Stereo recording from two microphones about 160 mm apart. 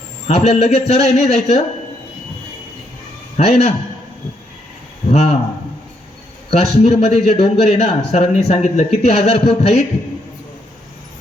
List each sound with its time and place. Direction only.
0.3 s speech: 45° left (ahead or behind)
3.3 s speech: 40° left (ahead or behind)
5.1 s speech: 40° left (ahead or behind)
6.5 s speech: 45° left (ahead or behind)